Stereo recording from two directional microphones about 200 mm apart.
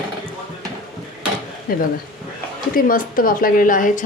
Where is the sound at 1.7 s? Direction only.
45° left (ahead or behind).